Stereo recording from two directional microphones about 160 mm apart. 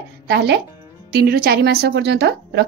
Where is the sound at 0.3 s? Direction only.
90° right.